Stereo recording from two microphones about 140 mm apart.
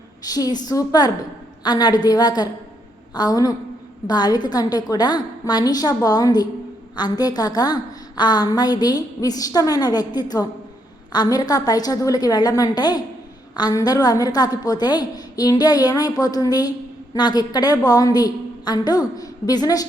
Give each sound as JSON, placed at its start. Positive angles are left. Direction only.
{"t": 0.3, "sound": "a woman's voice", "side_deg": 25}